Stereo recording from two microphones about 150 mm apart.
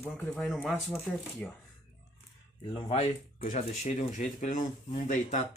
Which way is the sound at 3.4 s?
55° left (ahead or behind).